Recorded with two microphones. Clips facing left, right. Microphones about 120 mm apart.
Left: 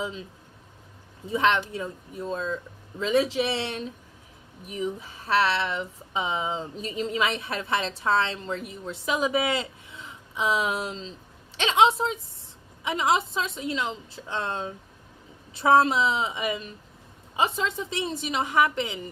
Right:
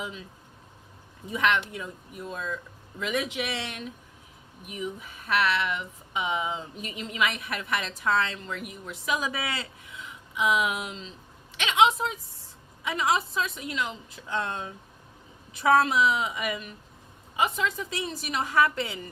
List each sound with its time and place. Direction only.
0.0 s a woman's voice: 30° left (ahead or behind)
1.3 s a woman's voice: 30° left (ahead or behind)